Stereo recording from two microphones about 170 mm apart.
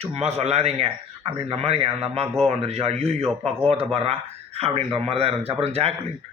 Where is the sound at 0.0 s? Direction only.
40° right (ahead or behind).